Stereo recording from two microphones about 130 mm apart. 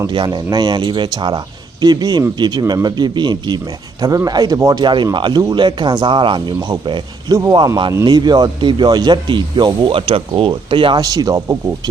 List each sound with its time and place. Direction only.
0.1 s speech: 35° right (ahead or behind)